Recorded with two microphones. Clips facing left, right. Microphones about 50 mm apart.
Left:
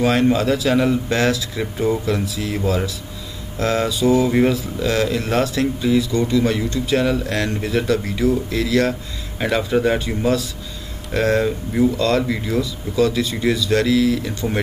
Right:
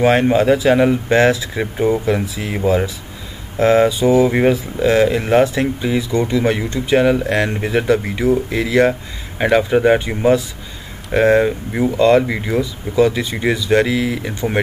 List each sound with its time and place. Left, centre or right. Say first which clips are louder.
0.0 s speech: right 4 dB; right